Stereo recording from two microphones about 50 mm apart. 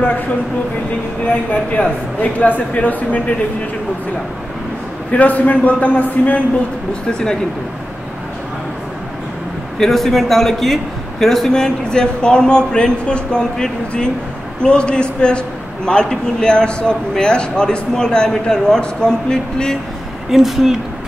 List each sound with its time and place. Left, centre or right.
1.2 s speech: left
5.1 s speech: left
9.8 s a man's voice: centre
20.2 s speech: centre